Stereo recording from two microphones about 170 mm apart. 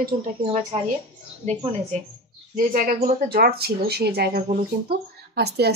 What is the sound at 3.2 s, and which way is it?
A woman's voice, 65° right (ahead or behind).